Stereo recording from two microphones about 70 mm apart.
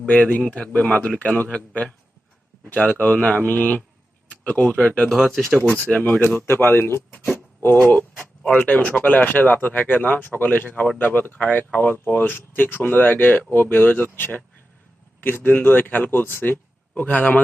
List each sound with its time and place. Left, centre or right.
0.0 s a man's voice: centre
5.1 s speech: centre
5.6 s speech: left
6.5 s speech: left
16.9 s speech: centre